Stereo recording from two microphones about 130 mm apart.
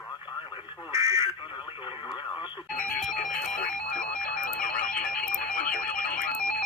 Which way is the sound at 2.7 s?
90° left.